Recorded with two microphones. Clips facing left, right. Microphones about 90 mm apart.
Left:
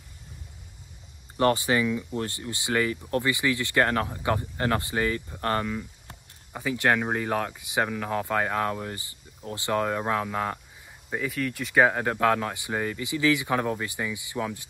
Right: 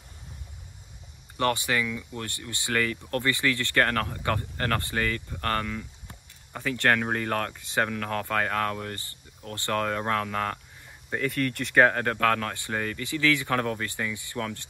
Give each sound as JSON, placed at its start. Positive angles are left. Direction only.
{"t": 1.3, "sound": "speech", "side_deg": 20}